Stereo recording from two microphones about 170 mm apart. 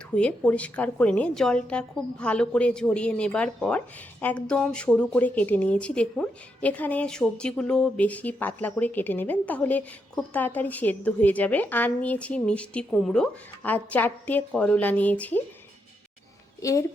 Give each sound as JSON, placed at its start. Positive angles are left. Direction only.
{"t": 0.1, "sound": "a woman's voice", "side_deg": 5}
{"t": 16.6, "sound": "speech", "side_deg": 20}